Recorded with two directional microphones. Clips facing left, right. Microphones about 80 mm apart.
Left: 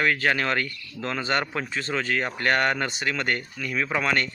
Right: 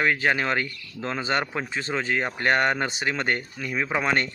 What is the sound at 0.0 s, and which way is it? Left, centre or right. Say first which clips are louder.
Speech: even; centre.